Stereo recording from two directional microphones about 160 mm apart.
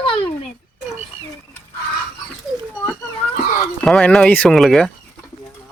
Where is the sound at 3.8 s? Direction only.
5° left (ahead or behind).